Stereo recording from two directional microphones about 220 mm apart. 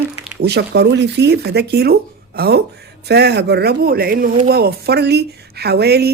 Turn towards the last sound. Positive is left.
turn(degrees=-45)  # may be behind; listen again after turning